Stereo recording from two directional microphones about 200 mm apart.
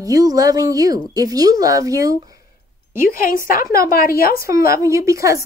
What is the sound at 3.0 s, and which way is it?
A woman's voice, 45° left (ahead or behind).